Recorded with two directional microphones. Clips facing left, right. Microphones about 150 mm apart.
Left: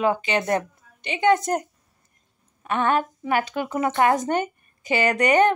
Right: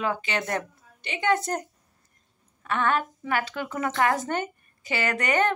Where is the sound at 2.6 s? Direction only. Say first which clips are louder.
Left 3 dB; 20° left (ahead or behind).